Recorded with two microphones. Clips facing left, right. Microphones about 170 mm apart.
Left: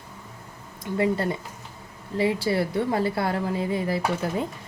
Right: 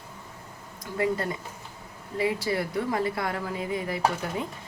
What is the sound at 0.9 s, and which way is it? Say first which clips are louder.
A woman's voice: left 3 dB; 25° left (ahead or behind).